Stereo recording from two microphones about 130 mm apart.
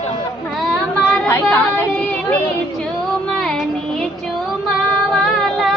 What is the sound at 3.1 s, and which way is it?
Child singing, 5° left (ahead or behind).